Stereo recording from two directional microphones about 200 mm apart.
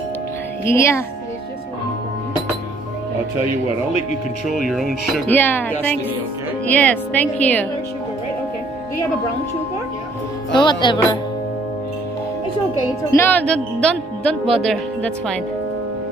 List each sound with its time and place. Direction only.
0.7 s speech: 15° left (ahead or behind)
4.6 s speech: centre (ahead or behind)
10.5 s music: 25° left (ahead or behind)
13.1 s speech: 10° left (ahead or behind)